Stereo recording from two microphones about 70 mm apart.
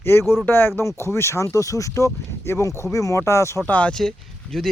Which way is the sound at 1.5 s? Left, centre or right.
Left.